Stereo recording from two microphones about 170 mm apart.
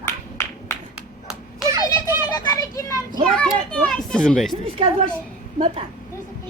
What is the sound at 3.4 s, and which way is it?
Children playing, 5° left (ahead or behind).